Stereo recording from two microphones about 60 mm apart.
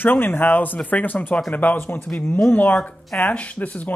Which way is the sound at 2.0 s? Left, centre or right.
Left.